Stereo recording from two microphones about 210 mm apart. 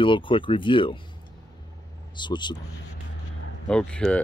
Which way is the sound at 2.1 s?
20° left (ahead or behind).